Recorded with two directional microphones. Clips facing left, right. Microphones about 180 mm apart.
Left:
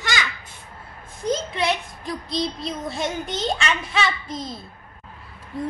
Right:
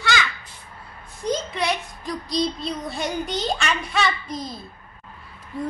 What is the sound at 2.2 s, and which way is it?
Child singing, 25° left (ahead or behind).